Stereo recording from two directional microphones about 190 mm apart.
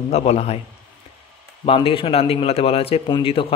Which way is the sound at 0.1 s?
35° left (ahead or behind).